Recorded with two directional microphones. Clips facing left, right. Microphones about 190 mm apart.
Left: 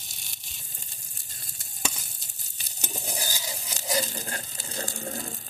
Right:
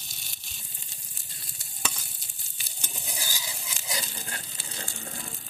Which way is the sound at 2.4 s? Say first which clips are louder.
Left 5 dB; 40° left (ahead or behind).